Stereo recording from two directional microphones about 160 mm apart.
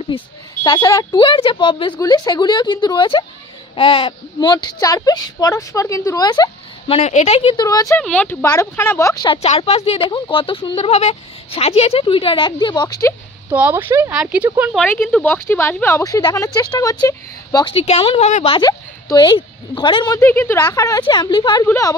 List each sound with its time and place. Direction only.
0.7 s speech: 25° left (ahead or behind)
6.9 s speech: 45° left (ahead or behind)
7.5 s speech: 20° left (ahead or behind)
8.0 s speech: 10° left (ahead or behind)
9.3 s speech: 35° left (ahead or behind)
13.5 s speech: 10° right (ahead or behind)
14.8 s speech: 5° left (ahead or behind); by 17.7 s 25° left (ahead or behind)
17.7 s speech: 40° left (ahead or behind)
18.7 s speech: 25° left (ahead or behind)
20.2 s speech: 15° left (ahead or behind)